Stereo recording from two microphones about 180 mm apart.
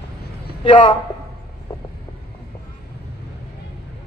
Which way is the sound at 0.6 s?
25° left (ahead or behind).